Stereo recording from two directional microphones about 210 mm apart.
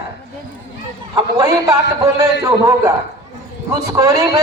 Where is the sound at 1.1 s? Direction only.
15° right (ahead or behind).